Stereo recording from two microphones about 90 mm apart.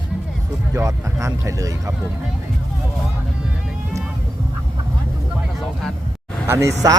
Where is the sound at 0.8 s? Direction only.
35° right (ahead or behind).